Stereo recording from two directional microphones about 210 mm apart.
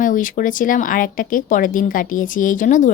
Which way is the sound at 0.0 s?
40° left (ahead or behind).